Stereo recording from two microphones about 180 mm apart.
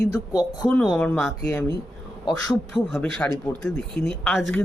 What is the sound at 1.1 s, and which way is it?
A man's voice, 15° left (ahead or behind).